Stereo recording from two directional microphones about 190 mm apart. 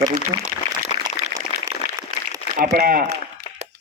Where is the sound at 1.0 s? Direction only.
20° right (ahead or behind).